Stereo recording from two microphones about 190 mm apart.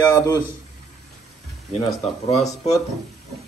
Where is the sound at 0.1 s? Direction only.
15° left (ahead or behind).